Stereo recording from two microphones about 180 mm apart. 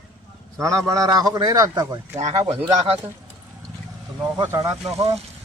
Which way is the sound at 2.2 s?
35° right (ahead or behind).